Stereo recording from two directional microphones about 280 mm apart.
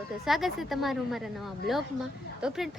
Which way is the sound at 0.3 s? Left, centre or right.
Centre.